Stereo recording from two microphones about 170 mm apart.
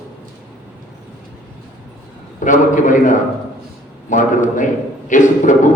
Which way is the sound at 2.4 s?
50° left (ahead or behind).